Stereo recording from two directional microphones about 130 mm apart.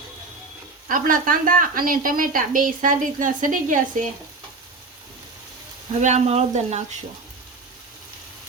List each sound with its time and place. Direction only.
0.9 s a woman's voice: 90° right
6.0 s speech: 65° right (ahead or behind)